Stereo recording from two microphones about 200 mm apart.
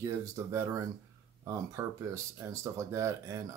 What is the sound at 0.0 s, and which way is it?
Speech, 15° right (ahead or behind).